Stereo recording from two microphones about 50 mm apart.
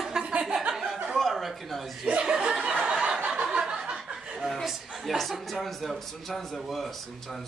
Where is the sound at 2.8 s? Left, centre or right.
Centre.